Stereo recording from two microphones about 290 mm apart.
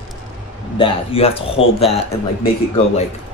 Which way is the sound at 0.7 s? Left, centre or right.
Centre.